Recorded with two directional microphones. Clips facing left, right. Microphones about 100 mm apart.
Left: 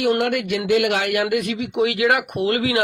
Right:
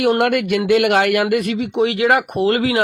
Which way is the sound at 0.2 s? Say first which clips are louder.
Right 5 dB; 55° right (ahead or behind).